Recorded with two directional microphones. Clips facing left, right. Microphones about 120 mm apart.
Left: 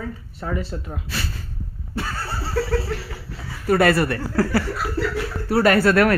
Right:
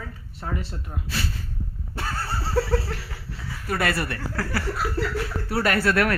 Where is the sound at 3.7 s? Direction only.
40° left (ahead or behind).